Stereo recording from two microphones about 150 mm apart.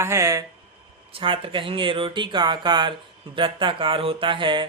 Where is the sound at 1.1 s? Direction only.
35° right (ahead or behind).